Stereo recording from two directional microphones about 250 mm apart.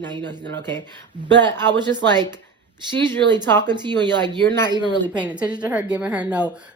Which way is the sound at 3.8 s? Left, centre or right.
Centre.